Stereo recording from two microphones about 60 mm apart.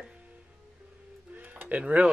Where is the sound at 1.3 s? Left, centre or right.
Right.